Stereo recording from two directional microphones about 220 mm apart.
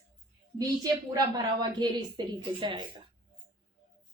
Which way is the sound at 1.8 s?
20° right (ahead or behind).